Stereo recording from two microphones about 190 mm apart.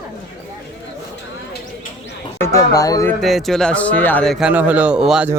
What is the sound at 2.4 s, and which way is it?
Speech, 15° left (ahead or behind).